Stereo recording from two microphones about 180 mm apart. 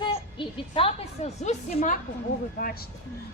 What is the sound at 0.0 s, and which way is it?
A woman's voice, 25° left (ahead or behind).